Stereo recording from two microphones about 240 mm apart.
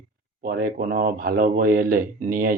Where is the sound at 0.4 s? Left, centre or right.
Right.